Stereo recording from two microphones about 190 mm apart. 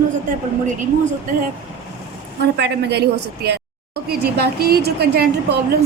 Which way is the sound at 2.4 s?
60° right (ahead or behind).